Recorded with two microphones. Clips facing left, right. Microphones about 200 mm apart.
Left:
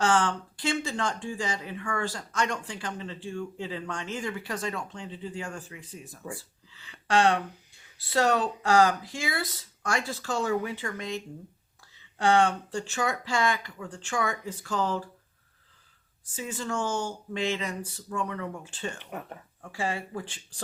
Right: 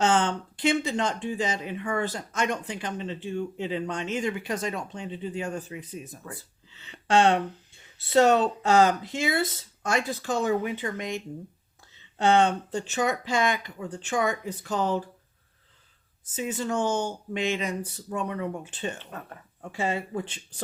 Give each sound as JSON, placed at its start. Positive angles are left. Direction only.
{"t": 0.0, "sound": "speech", "side_deg": -20}
{"t": 16.2, "sound": "speech", "side_deg": -20}
{"t": 18.9, "sound": "speech", "side_deg": 15}
{"t": 19.6, "sound": "speech", "side_deg": -20}